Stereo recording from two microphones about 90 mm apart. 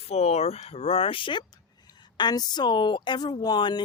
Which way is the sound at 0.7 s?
90° left.